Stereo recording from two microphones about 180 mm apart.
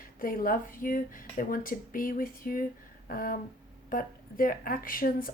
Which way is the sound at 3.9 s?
50° left (ahead or behind).